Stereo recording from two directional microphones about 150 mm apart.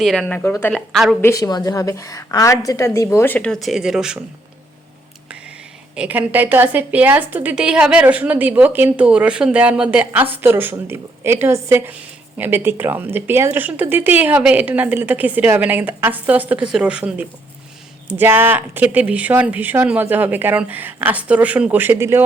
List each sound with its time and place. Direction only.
0.0 s a woman's voice: centre (ahead or behind)
0.7 s a woman's voice: centre (ahead or behind)
1.2 s a woman's voice: 20° left (ahead or behind); by 4.2 s 5° right (ahead or behind)
6.0 s speech: 10° right (ahead or behind)